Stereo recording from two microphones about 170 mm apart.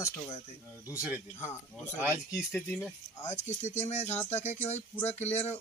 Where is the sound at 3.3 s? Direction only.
45° left (ahead or behind).